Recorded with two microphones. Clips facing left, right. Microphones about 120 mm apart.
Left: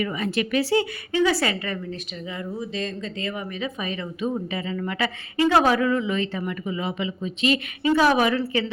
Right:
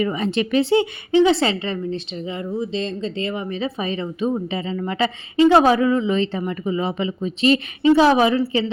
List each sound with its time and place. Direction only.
0.0 s a woman's voice: 25° right (ahead or behind)